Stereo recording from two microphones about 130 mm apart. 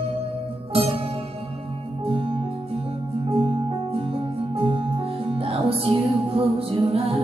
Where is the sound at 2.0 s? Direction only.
45° right (ahead or behind).